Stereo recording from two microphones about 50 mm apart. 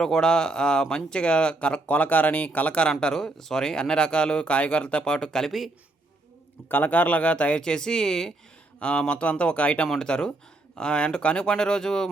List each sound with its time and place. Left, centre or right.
0.0 s speech: centre; by 2.7 s left
3.0 s speech: centre
5.5 s speech: centre
6.7 s speech: left; by 8.3 s centre
8.8 s speech: left